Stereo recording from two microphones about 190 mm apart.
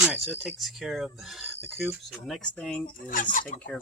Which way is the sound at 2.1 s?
Centre (ahead or behind).